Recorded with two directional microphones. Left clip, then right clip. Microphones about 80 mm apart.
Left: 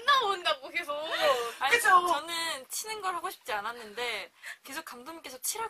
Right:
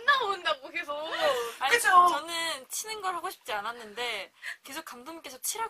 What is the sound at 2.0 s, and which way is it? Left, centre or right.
Speech, centre.